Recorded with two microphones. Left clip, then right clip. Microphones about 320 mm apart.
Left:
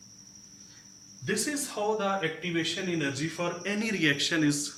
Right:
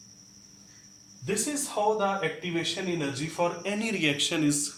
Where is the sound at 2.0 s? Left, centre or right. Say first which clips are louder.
Right 1 dB; centre.